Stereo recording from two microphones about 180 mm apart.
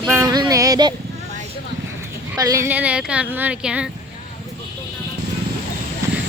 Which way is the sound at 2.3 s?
20° right (ahead or behind).